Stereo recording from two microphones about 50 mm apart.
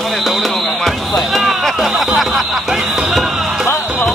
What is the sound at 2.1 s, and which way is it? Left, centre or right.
Snicker, centre.